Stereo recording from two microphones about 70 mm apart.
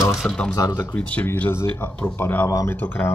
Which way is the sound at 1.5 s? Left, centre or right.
Left.